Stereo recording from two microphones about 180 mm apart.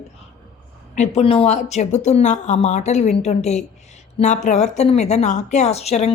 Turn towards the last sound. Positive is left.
turn(degrees=35)  # may be behind; listen again after turning